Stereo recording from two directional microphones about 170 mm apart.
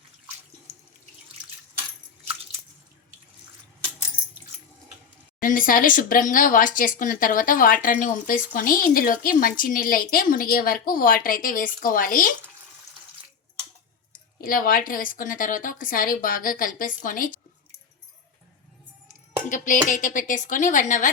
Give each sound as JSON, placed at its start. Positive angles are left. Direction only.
{"t": 5.4, "sound": "speech", "side_deg": 50}
{"t": 14.4, "sound": "a woman's voice", "side_deg": 55}
{"t": 19.0, "sound": "a sound", "side_deg": 50}
{"t": 19.9, "sound": "a woman's voice", "side_deg": 50}